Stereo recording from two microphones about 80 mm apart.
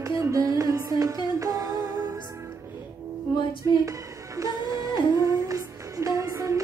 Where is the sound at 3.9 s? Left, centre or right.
Right.